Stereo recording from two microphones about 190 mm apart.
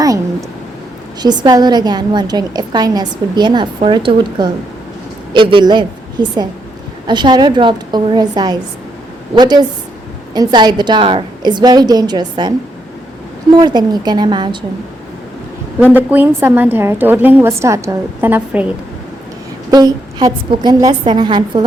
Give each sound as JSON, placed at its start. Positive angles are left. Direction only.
{"t": 1.2, "sound": "a woman's voice", "side_deg": -20}
{"t": 15.8, "sound": "a woman's voice", "side_deg": -10}
{"t": 19.7, "sound": "a woman's voice", "side_deg": -20}